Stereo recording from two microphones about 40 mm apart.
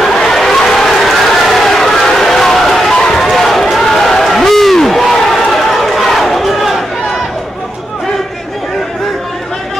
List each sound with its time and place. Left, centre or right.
0.1 s run: centre
1.0 s crowd: centre
3.2 s run: centre